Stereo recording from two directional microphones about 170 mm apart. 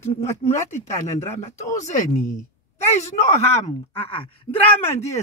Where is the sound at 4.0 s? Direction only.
35° left (ahead or behind).